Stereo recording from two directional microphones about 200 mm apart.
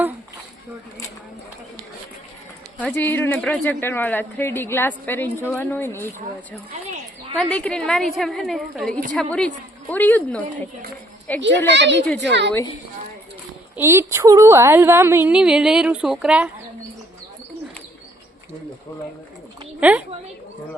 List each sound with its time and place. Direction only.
2.7 s speech: 10° left (ahead or behind)
7.3 s a woman's voice: 5° left (ahead or behind)
11.7 s speech: 60° right (ahead or behind)
12.0 s speech: 5° left (ahead or behind)
13.7 s a woman's voice: 10° right (ahead or behind)
19.8 s a woman's voice: 5° right (ahead or behind)